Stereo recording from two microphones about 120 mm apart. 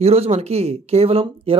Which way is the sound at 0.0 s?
60° right (ahead or behind).